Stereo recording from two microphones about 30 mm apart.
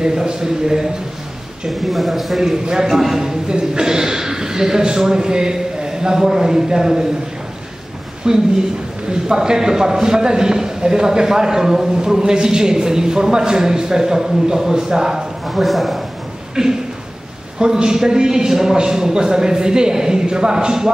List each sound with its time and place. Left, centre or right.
0.0 s a man's voice: right
1.7 s a man's voice: centre
2.6 s a man's voice: right
2.9 s a man's voice: centre
3.2 s a man's voice: right
8.2 s a man's voice: right
15.4 s speech: centre
16.6 s a man's voice: centre